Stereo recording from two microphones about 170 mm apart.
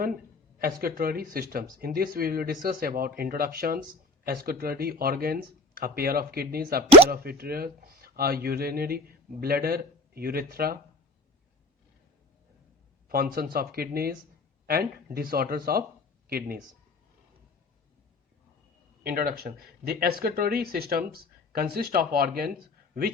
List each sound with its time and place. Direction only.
0.6 s speech: 60° right (ahead or behind)
13.1 s speech: 60° right (ahead or behind)
19.0 s speech: 60° right (ahead or behind)